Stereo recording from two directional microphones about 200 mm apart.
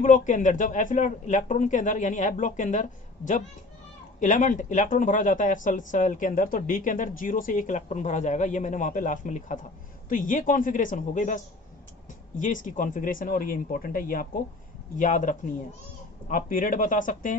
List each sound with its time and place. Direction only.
0.0 s speech: 40° left (ahead or behind)
12.6 s speech: 40° left (ahead or behind)